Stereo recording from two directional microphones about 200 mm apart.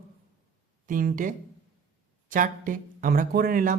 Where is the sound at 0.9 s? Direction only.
45° right (ahead or behind).